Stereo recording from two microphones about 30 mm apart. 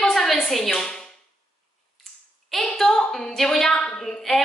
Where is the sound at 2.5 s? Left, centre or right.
Centre.